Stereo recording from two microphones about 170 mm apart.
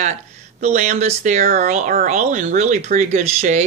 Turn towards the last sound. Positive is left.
turn(degrees=-45)  # may be behind; listen again after turning